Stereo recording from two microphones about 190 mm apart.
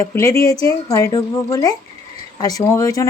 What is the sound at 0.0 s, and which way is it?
Speech, 15° left (ahead or behind).